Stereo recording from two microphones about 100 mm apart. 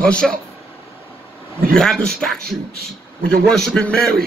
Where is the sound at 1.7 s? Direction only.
5° left (ahead or behind).